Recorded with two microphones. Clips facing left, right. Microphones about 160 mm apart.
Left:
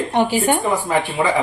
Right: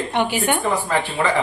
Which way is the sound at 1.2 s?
15° left (ahead or behind).